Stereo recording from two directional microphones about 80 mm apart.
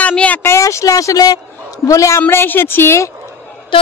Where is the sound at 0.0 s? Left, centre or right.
Centre.